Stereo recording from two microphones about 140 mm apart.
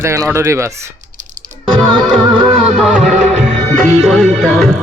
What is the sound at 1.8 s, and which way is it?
Music, 35° right (ahead or behind).